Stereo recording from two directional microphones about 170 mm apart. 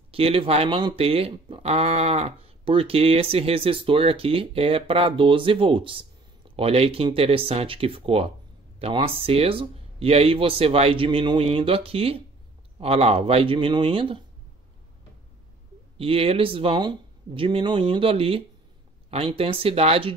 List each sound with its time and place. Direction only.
0.1 s speech: 35° right (ahead or behind)
16.0 s speech: 35° right (ahead or behind)